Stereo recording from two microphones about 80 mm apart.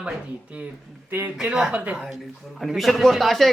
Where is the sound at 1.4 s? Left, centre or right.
Centre.